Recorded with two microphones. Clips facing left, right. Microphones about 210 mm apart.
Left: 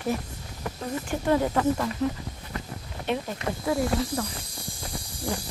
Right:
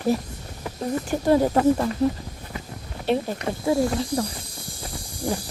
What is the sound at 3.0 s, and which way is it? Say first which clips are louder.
Speech: right 5 dB; 30° right (ahead or behind).